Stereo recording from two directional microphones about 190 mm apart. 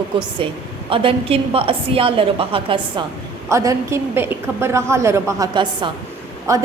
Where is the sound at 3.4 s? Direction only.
15° right (ahead or behind).